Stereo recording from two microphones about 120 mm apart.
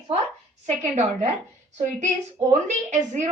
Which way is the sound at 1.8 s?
75° right (ahead or behind).